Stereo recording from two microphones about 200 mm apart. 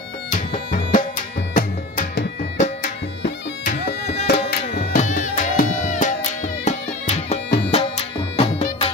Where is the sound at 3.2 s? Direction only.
55° left (ahead or behind).